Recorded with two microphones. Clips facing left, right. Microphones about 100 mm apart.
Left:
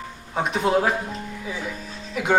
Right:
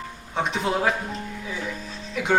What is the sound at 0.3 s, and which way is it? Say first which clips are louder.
Speech: left 2 dB; 5° left (ahead or behind).